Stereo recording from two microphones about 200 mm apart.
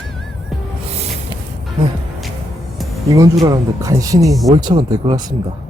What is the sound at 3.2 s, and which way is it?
Speech, 20° right (ahead or behind).